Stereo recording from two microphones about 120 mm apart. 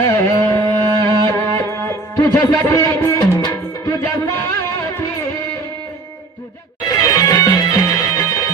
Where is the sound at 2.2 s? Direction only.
25° left (ahead or behind).